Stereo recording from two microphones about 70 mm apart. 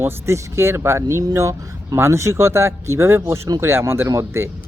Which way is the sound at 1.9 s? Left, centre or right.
Right.